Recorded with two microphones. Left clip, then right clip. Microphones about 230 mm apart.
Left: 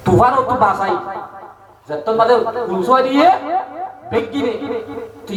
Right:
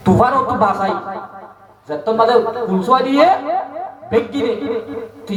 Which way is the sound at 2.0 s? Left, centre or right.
Right.